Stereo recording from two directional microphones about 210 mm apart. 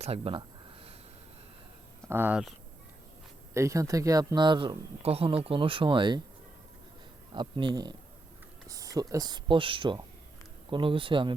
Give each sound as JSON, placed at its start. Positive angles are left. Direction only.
{"t": 0.0, "sound": "speech", "side_deg": -25}
{"t": 2.0, "sound": "speech", "side_deg": -10}
{"t": 3.5, "sound": "speech", "side_deg": -15}
{"t": 7.3, "sound": "speech", "side_deg": -20}